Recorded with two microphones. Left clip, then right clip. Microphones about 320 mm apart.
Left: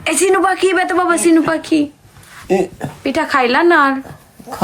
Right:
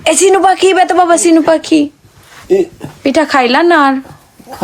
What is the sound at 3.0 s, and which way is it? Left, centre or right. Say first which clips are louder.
Speech: right 5 dB; centre.